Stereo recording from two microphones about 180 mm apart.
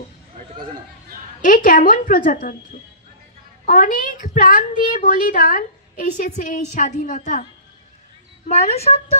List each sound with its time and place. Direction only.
1.4 s a woman's voice: 45° left (ahead or behind)
3.6 s a woman's voice: 50° left (ahead or behind)
8.5 s speech: 35° left (ahead or behind)